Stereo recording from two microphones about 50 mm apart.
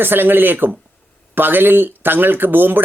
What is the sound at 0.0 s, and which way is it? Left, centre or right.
Speech, right.